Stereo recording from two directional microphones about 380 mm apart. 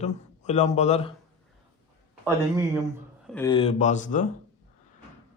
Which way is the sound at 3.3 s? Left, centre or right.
Centre.